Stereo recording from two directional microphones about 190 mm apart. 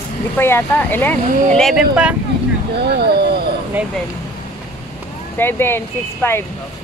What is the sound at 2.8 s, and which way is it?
Speech, 55° right (ahead or behind).